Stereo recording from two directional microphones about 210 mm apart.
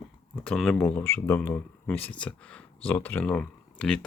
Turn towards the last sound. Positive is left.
turn(degrees=5)  # may be behind; listen again after turning